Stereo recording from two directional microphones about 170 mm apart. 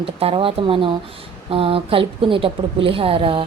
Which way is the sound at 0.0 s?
35° right (ahead or behind).